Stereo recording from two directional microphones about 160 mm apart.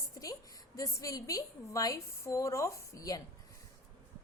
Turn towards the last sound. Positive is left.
turn(degrees=20)  # may be behind; listen again after turning